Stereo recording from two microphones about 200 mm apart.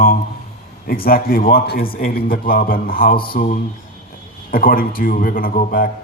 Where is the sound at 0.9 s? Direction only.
50° left (ahead or behind).